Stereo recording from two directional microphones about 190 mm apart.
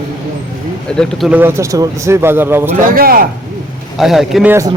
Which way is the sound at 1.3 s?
10° right (ahead or behind).